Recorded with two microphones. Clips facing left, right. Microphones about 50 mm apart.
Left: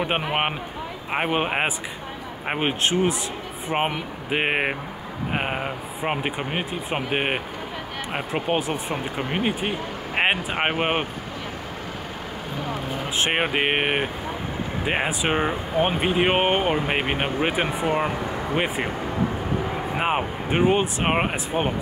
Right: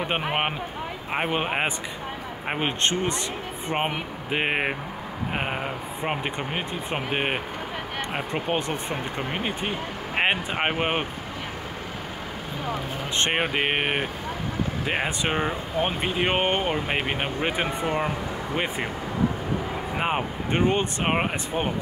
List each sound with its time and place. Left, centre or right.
0.0 s speech: centre
13.2 s speech: centre
20.0 s speech: centre